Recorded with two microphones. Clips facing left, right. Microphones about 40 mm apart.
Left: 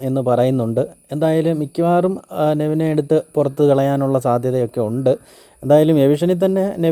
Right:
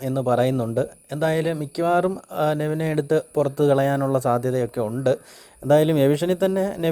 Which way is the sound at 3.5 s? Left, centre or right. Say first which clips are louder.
Left 4 dB; left.